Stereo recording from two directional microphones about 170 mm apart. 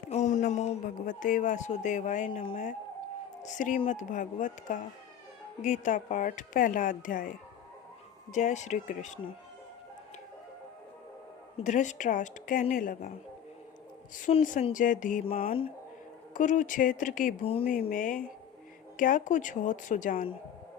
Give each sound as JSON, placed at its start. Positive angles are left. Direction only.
{"t": 0.1, "sound": "speech", "side_deg": 45}
{"t": 3.4, "sound": "speech", "side_deg": 45}
{"t": 11.5, "sound": "speech", "side_deg": 45}
{"t": 14.2, "sound": "speech", "side_deg": 45}
{"t": 16.3, "sound": "speech", "side_deg": 50}
{"t": 17.4, "sound": "speech", "side_deg": 35}
{"t": 17.7, "sound": "speech", "side_deg": 55}